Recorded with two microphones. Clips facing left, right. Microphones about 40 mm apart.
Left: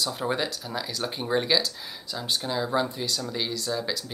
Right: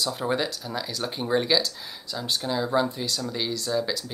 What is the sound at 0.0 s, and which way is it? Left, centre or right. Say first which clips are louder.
Speech: right 1 dB; centre.